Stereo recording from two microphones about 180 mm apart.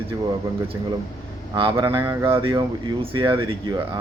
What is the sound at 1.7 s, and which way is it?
Speech, 25° right (ahead or behind).